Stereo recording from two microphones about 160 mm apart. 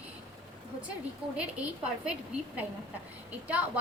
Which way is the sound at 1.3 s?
5° right (ahead or behind).